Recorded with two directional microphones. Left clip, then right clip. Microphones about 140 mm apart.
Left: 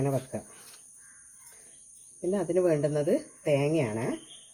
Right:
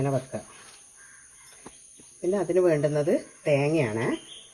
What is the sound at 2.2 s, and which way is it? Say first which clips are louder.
Speech: right 3 dB; 5° left (ahead or behind).